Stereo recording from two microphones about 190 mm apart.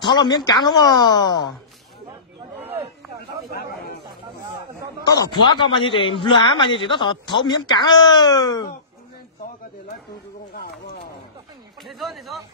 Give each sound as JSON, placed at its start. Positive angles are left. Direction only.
{"t": 0.0, "sound": "a man's voice", "side_deg": 25}
{"t": 3.5, "sound": "chatter", "side_deg": 55}
{"t": 5.0, "sound": "a man's voice", "side_deg": 20}
{"t": 11.8, "sound": "speech", "side_deg": 0}